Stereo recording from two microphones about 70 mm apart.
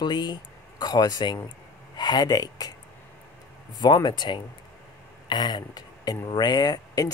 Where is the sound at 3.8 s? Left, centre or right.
Left.